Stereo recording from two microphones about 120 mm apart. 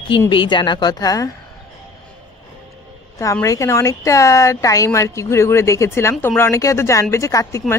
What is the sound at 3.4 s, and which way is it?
Speech, 25° left (ahead or behind).